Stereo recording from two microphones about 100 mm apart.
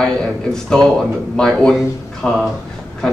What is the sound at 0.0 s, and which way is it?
A man's voice, 5° left (ahead or behind).